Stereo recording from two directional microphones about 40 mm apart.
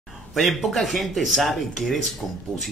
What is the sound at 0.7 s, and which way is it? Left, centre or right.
Speech, centre.